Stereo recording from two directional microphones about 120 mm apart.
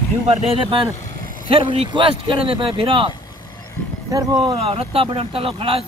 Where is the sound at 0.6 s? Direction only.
45° right (ahead or behind).